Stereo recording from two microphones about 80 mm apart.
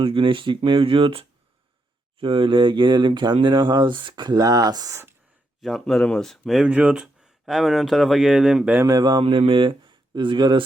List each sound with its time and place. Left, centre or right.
0.0 s speech: right
2.2 s speech: right
5.6 s speech: centre
6.7 s speech: centre
8.8 s speech: right